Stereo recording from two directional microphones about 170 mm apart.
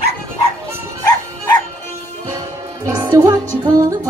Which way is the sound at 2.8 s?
20° right (ahead or behind).